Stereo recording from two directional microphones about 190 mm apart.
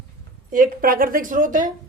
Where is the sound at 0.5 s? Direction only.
45° right (ahead or behind).